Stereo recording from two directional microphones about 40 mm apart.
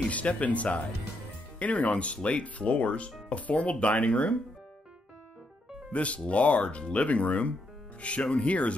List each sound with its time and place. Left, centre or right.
0.0 s speech: left
5.9 s speech: left